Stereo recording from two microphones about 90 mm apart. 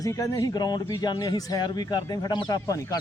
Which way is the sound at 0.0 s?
40° left (ahead or behind).